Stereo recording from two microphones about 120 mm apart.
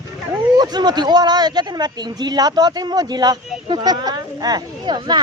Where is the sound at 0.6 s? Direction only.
35° right (ahead or behind).